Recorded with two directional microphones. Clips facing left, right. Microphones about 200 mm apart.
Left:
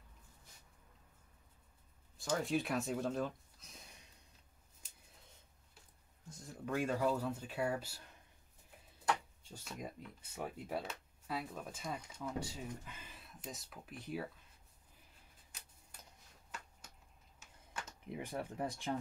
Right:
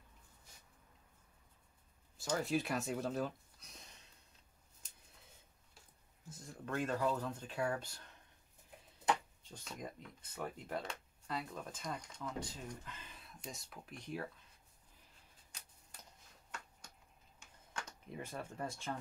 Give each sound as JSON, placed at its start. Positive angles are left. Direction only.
{"t": 2.1, "sound": "speech", "side_deg": 0}
{"t": 6.2, "sound": "speech", "side_deg": 0}
{"t": 9.5, "sound": "speech", "side_deg": 5}
{"t": 17.4, "sound": "computer keyboard", "side_deg": 5}